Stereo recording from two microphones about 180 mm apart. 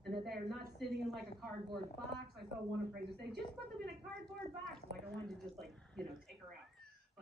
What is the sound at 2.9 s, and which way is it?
Speech, 65° right (ahead or behind).